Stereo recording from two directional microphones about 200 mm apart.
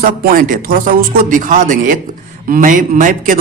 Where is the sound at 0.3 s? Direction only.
45° right (ahead or behind).